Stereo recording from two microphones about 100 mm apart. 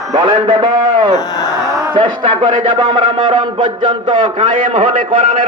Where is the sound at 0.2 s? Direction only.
50° right (ahead or behind).